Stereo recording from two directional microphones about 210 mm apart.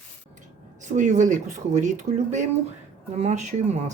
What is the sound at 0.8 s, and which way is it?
Speech, 35° right (ahead or behind).